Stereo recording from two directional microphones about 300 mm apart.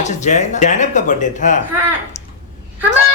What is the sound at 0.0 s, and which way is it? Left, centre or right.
Speech, left.